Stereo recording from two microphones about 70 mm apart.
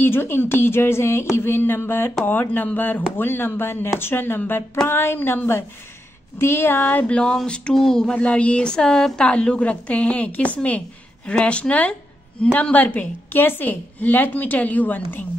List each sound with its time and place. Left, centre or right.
0.0 s a woman's voice: left